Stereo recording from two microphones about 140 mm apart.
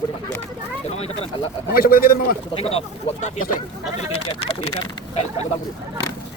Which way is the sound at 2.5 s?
45° left (ahead or behind).